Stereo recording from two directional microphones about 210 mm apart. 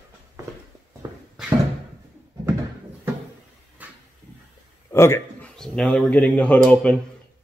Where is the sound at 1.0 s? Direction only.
15° right (ahead or behind).